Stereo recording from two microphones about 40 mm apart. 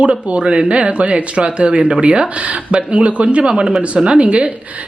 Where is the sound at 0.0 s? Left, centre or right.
Right.